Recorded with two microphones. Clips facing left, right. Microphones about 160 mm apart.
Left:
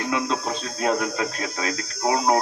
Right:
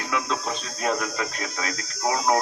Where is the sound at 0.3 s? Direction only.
30° left (ahead or behind).